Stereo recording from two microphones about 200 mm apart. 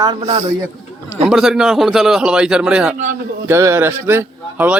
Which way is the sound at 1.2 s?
5° right (ahead or behind).